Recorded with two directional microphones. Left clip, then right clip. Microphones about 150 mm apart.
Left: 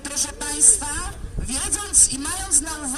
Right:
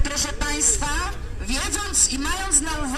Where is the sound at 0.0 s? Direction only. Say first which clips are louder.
Right 2 dB; 35° left (ahead or behind).